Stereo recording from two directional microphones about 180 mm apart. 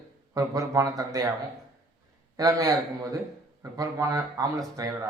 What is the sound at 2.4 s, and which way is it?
A man's voice, 20° right (ahead or behind).